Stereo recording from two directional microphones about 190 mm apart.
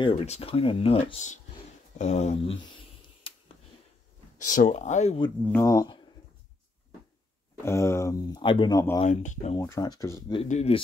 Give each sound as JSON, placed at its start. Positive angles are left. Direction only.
{"t": 0.0, "sound": "speech", "side_deg": 30}
{"t": 4.5, "sound": "speech", "side_deg": 45}
{"t": 5.5, "sound": "speech", "side_deg": 15}
{"t": 7.6, "sound": "speech", "side_deg": 15}
{"t": 9.0, "sound": "speech", "side_deg": 40}
{"t": 9.6, "sound": "speech", "side_deg": 20}
{"t": 10.4, "sound": "speech", "side_deg": 35}